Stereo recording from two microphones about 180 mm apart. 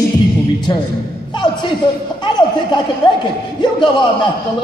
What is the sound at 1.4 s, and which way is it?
A man's voice, 25° left (ahead or behind).